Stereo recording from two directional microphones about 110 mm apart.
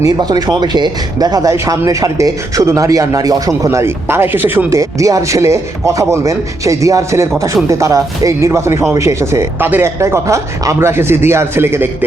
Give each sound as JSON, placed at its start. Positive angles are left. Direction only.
{"t": 0.0, "sound": "speech", "side_deg": -35}